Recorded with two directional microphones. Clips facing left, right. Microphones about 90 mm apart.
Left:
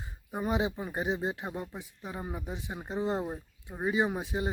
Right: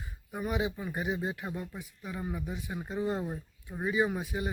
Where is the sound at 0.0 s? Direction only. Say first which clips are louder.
Left 2 dB; 25° left (ahead or behind).